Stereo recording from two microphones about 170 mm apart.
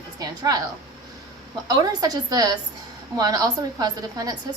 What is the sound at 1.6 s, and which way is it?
A woman's voice, 25° right (ahead or behind).